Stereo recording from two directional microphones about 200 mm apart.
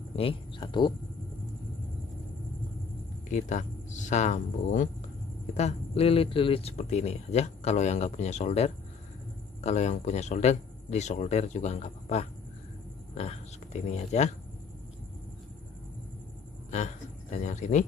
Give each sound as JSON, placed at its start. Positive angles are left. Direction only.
{"t": 0.1, "sound": "speech", "side_deg": 25}
{"t": 3.3, "sound": "speech", "side_deg": 35}
{"t": 16.7, "sound": "a sound", "side_deg": 35}